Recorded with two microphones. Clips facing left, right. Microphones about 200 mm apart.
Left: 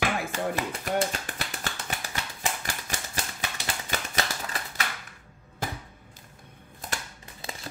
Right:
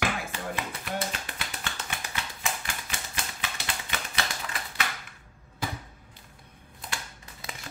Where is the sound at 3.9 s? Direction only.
40° left (ahead or behind).